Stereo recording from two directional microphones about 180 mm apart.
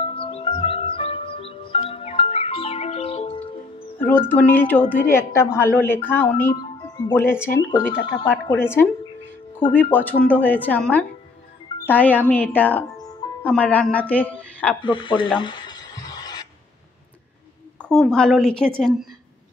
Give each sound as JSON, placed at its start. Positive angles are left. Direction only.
{"t": 0.0, "sound": "music", "side_deg": 30}
{"t": 4.3, "sound": "a woman's voice", "side_deg": 10}
{"t": 14.8, "sound": "speech", "side_deg": 25}
{"t": 15.3, "sound": "a sound", "side_deg": 25}
{"t": 17.8, "sound": "a woman's voice", "side_deg": 5}